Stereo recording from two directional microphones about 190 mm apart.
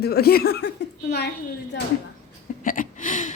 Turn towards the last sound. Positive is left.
turn(degrees=40)  # may be behind; listen again after turning